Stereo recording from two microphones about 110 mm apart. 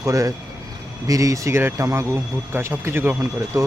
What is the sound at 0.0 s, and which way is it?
Speech, 30° right (ahead or behind).